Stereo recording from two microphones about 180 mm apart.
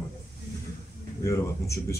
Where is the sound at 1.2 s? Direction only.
15° left (ahead or behind).